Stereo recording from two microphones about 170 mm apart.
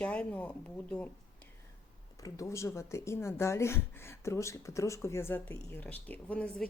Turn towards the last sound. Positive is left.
turn(degrees=5)  # may be behind; listen again after turning